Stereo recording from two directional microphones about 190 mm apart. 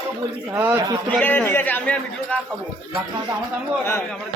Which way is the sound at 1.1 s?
10° left (ahead or behind).